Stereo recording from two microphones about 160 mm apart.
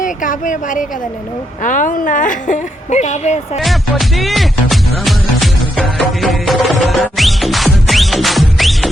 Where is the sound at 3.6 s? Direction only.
Centre (ahead or behind).